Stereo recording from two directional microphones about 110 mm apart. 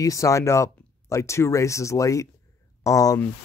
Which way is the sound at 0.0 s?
30° left (ahead or behind).